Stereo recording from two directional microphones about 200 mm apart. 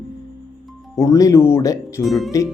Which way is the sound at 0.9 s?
15° left (ahead or behind).